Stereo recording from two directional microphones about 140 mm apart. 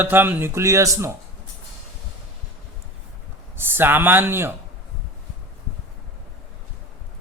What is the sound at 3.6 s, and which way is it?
Speech, 15° right (ahead or behind).